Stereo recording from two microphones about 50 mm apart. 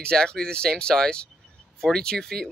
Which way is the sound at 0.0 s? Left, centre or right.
Centre.